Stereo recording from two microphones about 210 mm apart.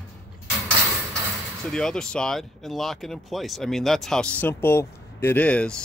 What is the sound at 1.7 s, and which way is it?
Speech, 5° left (ahead or behind).